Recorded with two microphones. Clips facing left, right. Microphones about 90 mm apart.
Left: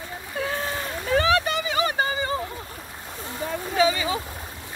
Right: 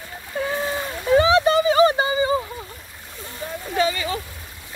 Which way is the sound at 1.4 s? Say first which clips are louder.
Right 9 dB; 35° right (ahead or behind).